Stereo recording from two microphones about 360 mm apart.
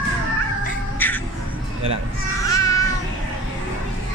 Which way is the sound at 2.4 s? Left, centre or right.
Centre.